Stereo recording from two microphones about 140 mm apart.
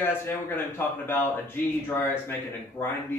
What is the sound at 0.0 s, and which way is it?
Speech, 15° left (ahead or behind).